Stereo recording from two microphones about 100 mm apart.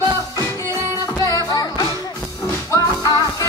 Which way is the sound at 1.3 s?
40° left (ahead or behind).